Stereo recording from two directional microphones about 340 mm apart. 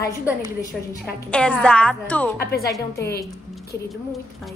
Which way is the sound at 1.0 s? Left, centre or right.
Centre.